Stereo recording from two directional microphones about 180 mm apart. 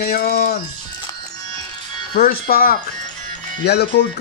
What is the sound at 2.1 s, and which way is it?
Speech, 55° left (ahead or behind).